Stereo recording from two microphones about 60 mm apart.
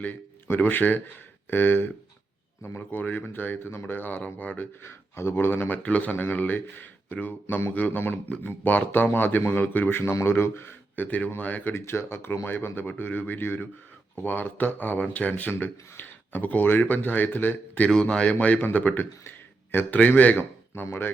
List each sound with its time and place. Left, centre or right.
0.4 s speech: left
4.8 s speech: left
10.0 s speech: left
11.7 s speech: left
17.8 s speech: centre; by 20.8 s left